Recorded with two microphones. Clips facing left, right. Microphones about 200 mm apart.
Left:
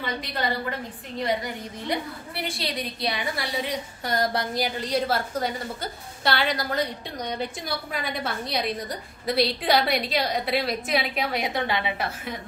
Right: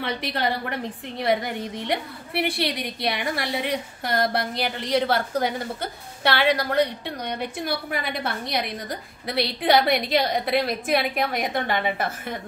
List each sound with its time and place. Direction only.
0.0 s a woman's voice: 70° right (ahead or behind); by 12.4 s 50° right (ahead or behind)